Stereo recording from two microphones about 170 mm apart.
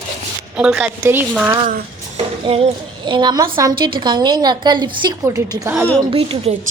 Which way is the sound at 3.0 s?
25° right (ahead or behind).